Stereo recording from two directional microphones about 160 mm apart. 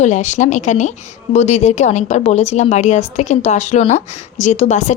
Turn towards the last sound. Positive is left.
turn(degrees=45)  # may be behind; listen again after turning